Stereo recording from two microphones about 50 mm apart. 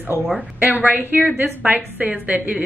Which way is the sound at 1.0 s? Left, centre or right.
Right.